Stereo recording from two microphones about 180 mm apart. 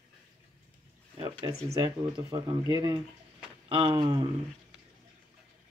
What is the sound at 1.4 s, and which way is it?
Speech, 20° right (ahead or behind).